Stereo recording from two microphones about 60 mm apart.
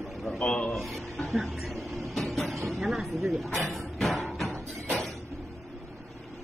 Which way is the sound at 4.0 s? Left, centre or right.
Centre.